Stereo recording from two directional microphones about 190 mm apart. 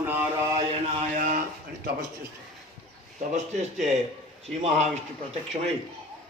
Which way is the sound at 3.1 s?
35° right (ahead or behind).